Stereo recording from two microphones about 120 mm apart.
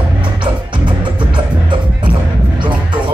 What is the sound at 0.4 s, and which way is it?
Music, 40° right (ahead or behind).